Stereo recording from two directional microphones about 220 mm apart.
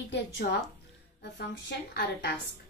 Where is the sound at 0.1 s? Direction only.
50° left (ahead or behind).